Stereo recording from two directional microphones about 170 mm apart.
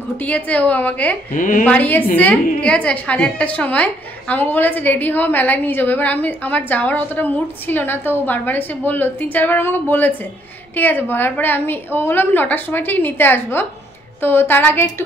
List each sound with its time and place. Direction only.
0.2 s a woman's voice: 10° left (ahead or behind)
1.3 s speech: 50° left (ahead or behind)
1.6 s a woman's voice: 10° left (ahead or behind)